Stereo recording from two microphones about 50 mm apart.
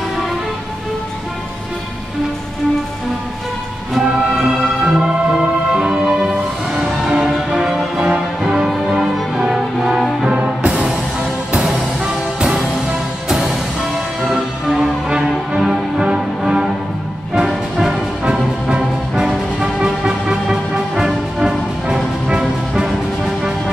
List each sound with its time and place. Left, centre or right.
4.0 s music: centre
8.4 s music: centre
10.2 s music: right
11.6 s music: centre
14.2 s music: centre